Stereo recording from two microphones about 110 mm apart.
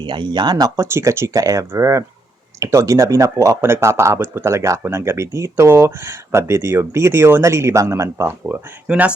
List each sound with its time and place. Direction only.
0.0 s speech: 45° right (ahead or behind)
0.9 s speech: 25° right (ahead or behind)
8.9 s speech: 10° right (ahead or behind)